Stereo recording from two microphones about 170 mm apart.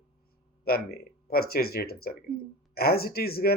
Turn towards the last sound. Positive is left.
turn(degrees=65)  # may be behind; listen again after turning